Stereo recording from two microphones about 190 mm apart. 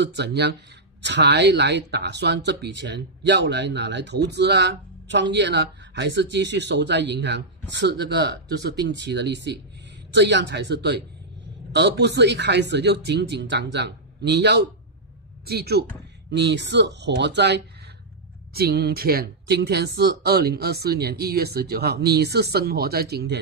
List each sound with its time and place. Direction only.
0.0 s speech: 60° right (ahead or behind)
16.3 s speech: 65° right (ahead or behind)